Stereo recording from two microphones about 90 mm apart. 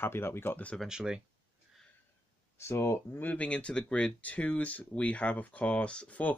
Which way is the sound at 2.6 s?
30° left (ahead or behind).